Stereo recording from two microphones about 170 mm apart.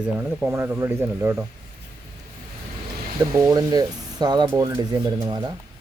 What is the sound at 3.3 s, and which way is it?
Speech, 20° right (ahead or behind).